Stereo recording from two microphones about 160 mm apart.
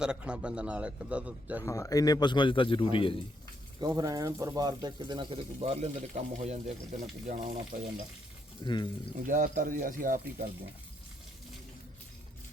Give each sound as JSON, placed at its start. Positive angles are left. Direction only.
{"t": 0.0, "sound": "a man's voice", "side_deg": -5}
{"t": 1.6, "sound": "a man's voice", "side_deg": 20}
{"t": 3.8, "sound": "speech", "side_deg": -25}
{"t": 8.6, "sound": "a man's voice", "side_deg": 30}
{"t": 9.2, "sound": "speech", "side_deg": -60}